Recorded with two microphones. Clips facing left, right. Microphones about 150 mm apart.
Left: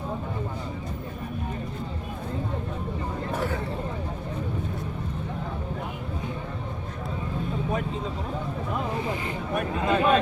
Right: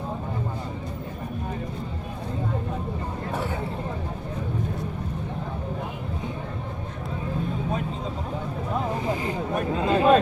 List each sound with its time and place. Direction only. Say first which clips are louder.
9.2 s chatter: right 2 dB; 30° right (ahead or behind)